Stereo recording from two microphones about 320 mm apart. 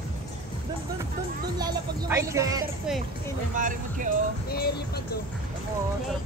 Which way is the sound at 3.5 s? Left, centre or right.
Right.